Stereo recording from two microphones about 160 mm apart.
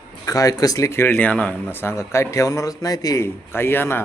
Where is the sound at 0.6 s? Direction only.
20° left (ahead or behind).